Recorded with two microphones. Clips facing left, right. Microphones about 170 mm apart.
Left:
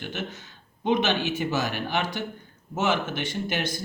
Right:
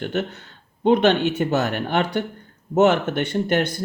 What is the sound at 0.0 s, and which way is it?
Speech, 60° right (ahead or behind).